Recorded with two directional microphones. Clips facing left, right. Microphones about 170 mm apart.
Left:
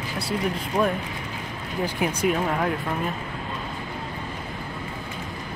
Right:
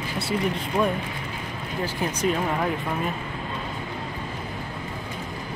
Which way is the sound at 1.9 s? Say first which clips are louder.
Left 1 dB; 10° left (ahead or behind).